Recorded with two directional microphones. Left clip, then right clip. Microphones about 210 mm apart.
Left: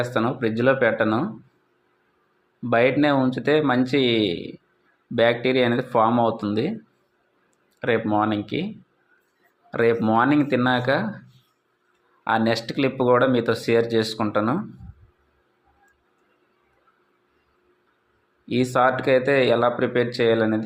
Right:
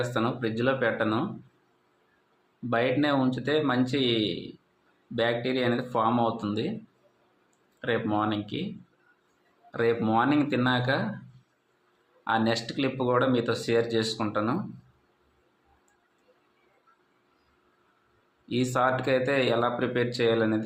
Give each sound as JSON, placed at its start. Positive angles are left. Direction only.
{"t": 0.0, "sound": "speech", "side_deg": 25}
{"t": 2.6, "sound": "speech", "side_deg": 30}
{"t": 7.8, "sound": "speech", "side_deg": 25}
{"t": 9.7, "sound": "speech", "side_deg": 25}
{"t": 12.2, "sound": "speech", "side_deg": 25}
{"t": 18.4, "sound": "speech", "side_deg": 25}